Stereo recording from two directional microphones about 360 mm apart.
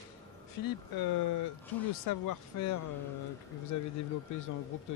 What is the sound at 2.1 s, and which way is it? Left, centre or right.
Speech, left.